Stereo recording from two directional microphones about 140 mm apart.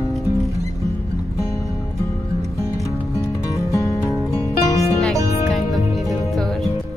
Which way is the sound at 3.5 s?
20° left (ahead or behind).